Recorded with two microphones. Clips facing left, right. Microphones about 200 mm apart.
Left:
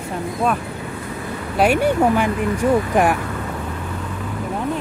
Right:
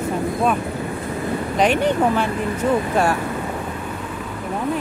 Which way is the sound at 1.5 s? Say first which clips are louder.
Left 2 dB; 10° left (ahead or behind).